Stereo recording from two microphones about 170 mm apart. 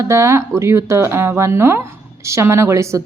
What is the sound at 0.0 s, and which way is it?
A woman's voice, 15° right (ahead or behind).